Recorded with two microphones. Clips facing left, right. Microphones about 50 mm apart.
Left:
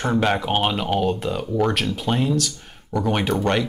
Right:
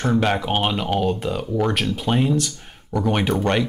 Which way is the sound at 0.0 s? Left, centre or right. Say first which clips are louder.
Even; centre.